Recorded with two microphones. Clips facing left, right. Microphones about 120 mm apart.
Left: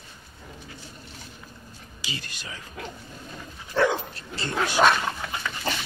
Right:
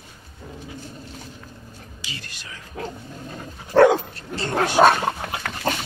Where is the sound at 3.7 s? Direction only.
55° right (ahead or behind).